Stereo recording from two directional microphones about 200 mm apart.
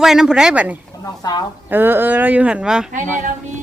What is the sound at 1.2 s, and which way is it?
Speech, 20° left (ahead or behind).